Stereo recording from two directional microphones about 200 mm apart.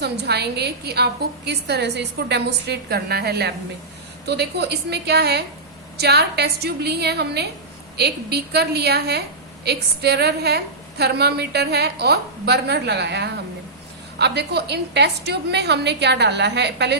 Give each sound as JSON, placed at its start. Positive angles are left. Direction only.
{"t": 0.0, "sound": "a woman's voice", "side_deg": -55}